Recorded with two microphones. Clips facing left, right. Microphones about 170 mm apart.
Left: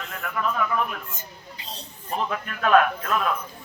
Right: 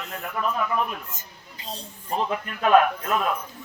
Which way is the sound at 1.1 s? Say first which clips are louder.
Left 3 dB; 45° right (ahead or behind).